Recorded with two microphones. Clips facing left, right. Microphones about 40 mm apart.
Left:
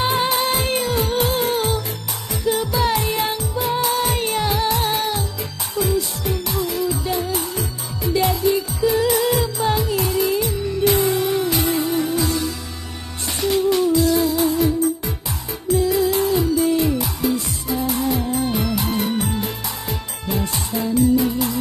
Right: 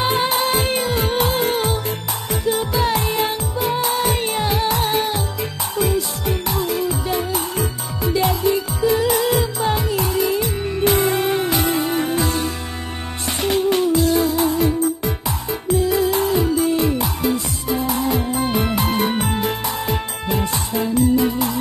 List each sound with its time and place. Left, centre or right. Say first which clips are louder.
0.1 s music: right 1 dB; right
7.3 s music: right 2 dB; right
10.8 s music: right 1 dB; right
13.4 s music: even; right
16.0 s music: even; right
18.6 s music: right 2 dB; right
20.7 s music: even; right